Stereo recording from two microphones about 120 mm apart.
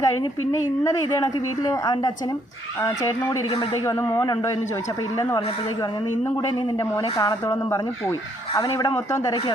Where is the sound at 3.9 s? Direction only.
20° left (ahead or behind).